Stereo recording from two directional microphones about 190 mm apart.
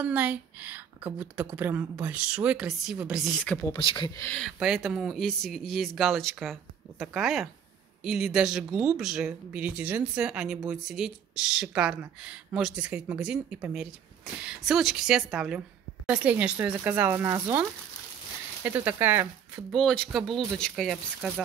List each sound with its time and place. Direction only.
0.0 s a woman's voice: 10° right (ahead or behind)
3.7 s speech: 25° left (ahead or behind)
4.2 s a woman's voice: 5° left (ahead or behind)
19.7 s speech: 5° left (ahead or behind)